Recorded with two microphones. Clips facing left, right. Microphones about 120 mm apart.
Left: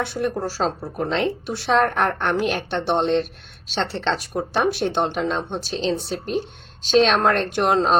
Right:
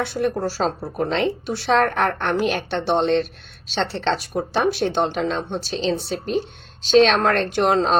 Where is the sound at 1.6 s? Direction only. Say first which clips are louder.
Even; 10° left (ahead or behind).